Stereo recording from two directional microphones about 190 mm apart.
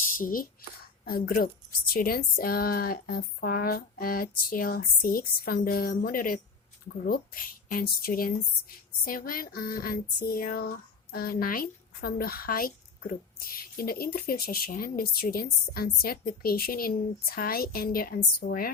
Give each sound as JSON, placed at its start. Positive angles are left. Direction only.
{"t": 0.2, "sound": "speech", "side_deg": 50}